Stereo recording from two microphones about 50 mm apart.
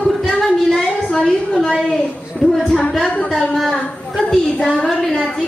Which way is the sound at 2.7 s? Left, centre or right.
Left.